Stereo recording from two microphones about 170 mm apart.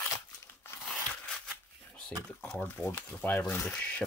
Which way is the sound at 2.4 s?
10° left (ahead or behind).